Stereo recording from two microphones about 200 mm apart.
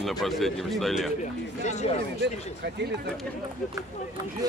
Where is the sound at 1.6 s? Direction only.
35° left (ahead or behind).